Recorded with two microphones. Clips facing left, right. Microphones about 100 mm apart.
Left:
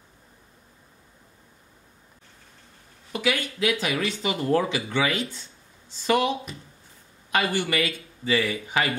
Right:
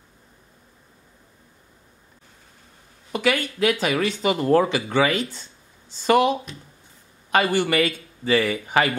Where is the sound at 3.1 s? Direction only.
50° right (ahead or behind).